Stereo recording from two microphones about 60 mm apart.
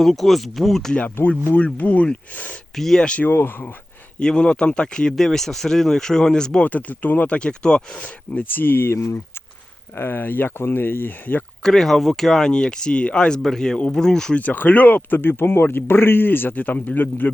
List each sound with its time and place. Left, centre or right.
0.0 s speech: centre
1.5 s speech: left
2.7 s speech: centre
3.2 s speech: left
4.2 s speech: centre
6.7 s speech: left
7.3 s speech: centre
8.3 s speech: left
11.6 s speech: centre
14.3 s speech: left